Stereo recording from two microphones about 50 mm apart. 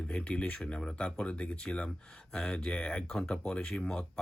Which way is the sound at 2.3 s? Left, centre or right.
Centre.